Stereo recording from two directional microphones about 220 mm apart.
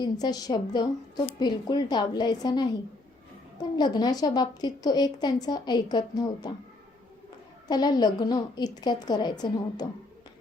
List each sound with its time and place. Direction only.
0.0 s a woman's voice: 15° left (ahead or behind)
7.7 s a woman's voice: 20° left (ahead or behind)